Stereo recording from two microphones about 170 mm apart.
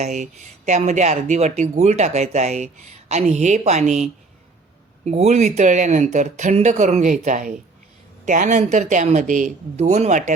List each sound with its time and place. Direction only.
0.0 s speech: 45° right (ahead or behind)